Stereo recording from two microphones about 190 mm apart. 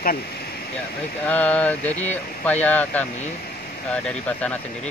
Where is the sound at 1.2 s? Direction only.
5° left (ahead or behind).